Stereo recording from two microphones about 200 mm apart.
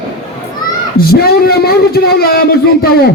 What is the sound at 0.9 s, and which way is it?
A man's voice, 50° left (ahead or behind).